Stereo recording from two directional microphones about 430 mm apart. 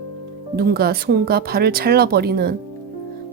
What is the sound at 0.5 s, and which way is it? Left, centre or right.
Speech, right.